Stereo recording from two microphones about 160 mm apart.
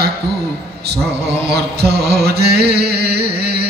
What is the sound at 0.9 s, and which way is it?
Mantra, 90° right.